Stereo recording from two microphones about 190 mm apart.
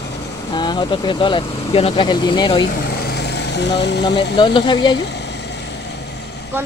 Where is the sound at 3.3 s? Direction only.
65° left (ahead or behind).